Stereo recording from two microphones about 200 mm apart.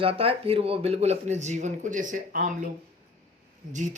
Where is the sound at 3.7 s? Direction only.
40° right (ahead or behind).